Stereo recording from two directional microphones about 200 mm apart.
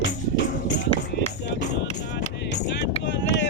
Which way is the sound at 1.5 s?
60° left (ahead or behind).